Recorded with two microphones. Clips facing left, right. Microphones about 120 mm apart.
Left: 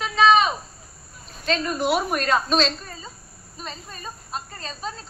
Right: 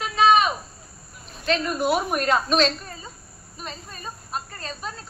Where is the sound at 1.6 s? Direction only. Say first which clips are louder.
Left 2 dB; 5° right (ahead or behind).